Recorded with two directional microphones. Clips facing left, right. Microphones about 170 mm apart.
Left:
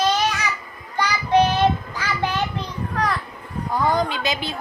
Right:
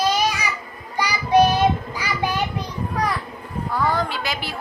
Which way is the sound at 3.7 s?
15° left (ahead or behind).